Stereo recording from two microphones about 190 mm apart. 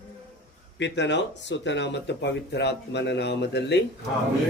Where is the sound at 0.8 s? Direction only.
70° left (ahead or behind).